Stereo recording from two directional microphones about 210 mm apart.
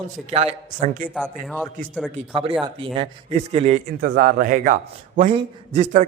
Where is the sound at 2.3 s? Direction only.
25° right (ahead or behind).